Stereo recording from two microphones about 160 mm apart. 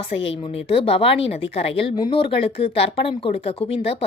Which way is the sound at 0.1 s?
35° left (ahead or behind).